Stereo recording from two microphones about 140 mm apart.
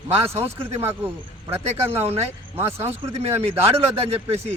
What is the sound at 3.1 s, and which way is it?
A man's voice, 45° right (ahead or behind).